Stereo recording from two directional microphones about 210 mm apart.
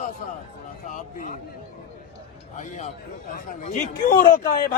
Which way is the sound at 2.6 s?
35° left (ahead or behind).